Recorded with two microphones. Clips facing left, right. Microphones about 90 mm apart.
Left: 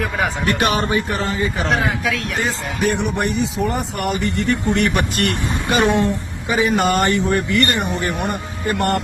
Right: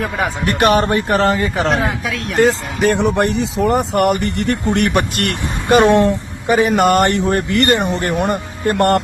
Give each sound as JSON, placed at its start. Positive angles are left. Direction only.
{"t": 0.4, "sound": "speech", "side_deg": -50}
{"t": 8.3, "sound": "speech", "side_deg": -90}